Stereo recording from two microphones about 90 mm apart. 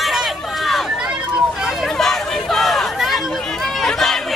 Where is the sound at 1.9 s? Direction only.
5° left (ahead or behind).